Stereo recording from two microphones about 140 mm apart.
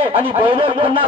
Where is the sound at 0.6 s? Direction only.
40° right (ahead or behind).